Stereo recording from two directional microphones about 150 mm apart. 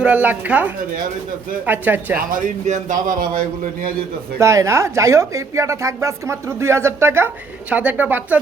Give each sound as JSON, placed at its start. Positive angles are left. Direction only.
{"t": 0.0, "sound": "speech", "side_deg": -10}
{"t": 2.1, "sound": "speech", "side_deg": -65}
{"t": 4.4, "sound": "speech", "side_deg": -20}